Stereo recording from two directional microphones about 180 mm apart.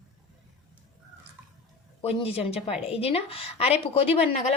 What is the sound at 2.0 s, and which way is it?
Speech, 35° left (ahead or behind).